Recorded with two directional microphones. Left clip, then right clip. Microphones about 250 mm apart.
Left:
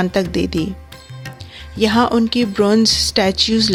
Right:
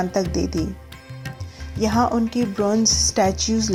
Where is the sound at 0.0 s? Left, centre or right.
Left.